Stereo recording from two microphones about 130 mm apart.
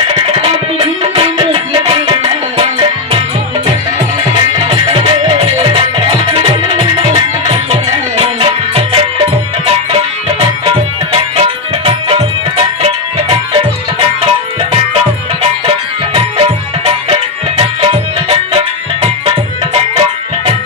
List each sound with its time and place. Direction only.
0.3 s music: 45° right (ahead or behind)
4.6 s music: 45° right (ahead or behind)
11.3 s music: 50° right (ahead or behind)
16.2 s music: 45° right (ahead or behind)